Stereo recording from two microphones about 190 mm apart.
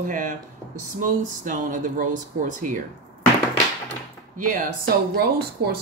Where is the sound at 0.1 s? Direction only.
45° right (ahead or behind).